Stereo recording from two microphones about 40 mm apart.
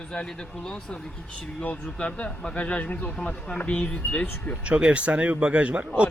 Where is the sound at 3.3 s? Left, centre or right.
Left.